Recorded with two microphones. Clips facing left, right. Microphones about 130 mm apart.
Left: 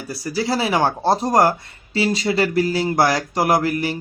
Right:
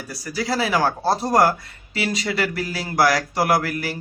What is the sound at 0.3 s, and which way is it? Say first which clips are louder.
Speech: left 2 dB; 25° left (ahead or behind).